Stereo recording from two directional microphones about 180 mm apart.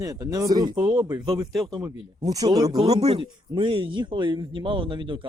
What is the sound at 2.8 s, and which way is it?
Speech, 35° right (ahead or behind).